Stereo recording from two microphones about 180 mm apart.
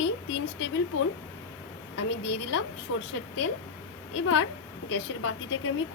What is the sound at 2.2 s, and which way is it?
Speech, 80° left.